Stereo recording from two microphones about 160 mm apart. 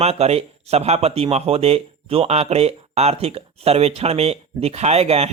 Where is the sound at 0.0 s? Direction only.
40° right (ahead or behind).